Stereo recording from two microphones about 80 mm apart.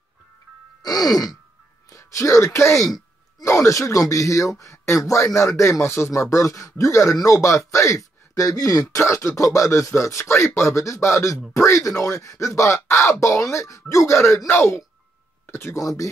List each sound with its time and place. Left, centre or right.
0.8 s groan: left
1.9 s speech: left
8.8 s speech: left
15.8 s speech: left